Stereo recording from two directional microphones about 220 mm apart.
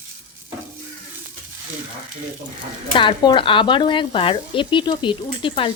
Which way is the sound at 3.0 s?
20° left (ahead or behind).